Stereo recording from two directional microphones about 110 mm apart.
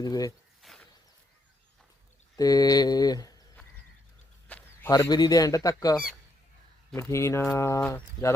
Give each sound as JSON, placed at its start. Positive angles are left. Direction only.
{"t": 0.0, "sound": "speech", "side_deg": 35}
{"t": 0.6, "sound": "a sound", "side_deg": 0}
{"t": 2.3, "sound": "speech", "side_deg": 35}
{"t": 4.4, "sound": "a sound", "side_deg": 15}
{"t": 4.9, "sound": "speech", "side_deg": 35}
{"t": 7.1, "sound": "speech", "side_deg": 25}
{"t": 7.8, "sound": "speech", "side_deg": 10}